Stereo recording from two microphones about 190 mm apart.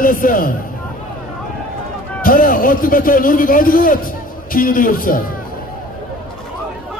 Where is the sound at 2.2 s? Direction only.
50° left (ahead or behind).